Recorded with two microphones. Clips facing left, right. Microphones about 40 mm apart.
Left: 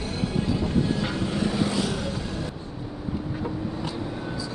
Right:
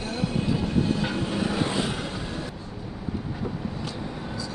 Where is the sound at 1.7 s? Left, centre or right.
Right.